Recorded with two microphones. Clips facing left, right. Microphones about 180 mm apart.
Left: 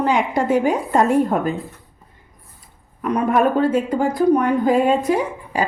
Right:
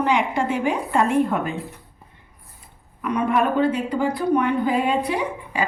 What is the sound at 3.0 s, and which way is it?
A woman's voice, 40° left (ahead or behind).